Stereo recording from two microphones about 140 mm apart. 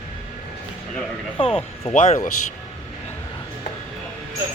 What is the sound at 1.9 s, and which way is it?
Speech, 60° left (ahead or behind).